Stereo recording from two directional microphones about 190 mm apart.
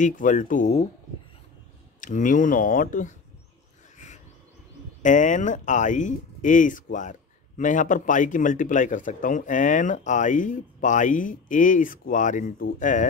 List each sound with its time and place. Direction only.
0.0 s speech: 40° left (ahead or behind)
2.0 s speech: 40° left (ahead or behind)
5.0 s speech: 40° left (ahead or behind)